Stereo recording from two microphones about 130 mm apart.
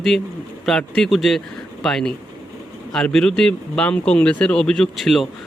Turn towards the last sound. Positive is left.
turn(degrees=0)  # may be behind; listen again after turning